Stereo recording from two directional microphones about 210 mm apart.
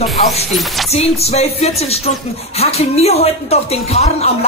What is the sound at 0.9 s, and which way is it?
A woman's voice, 30° left (ahead or behind).